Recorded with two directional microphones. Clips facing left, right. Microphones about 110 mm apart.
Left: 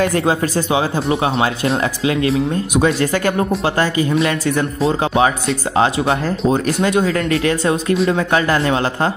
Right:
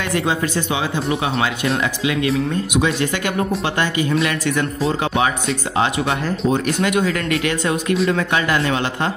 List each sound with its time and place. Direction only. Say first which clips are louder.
0.0 s speech: left 4 dB; 40° left (ahead or behind)